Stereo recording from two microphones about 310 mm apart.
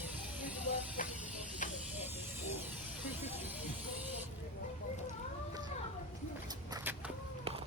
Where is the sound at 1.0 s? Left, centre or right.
Left.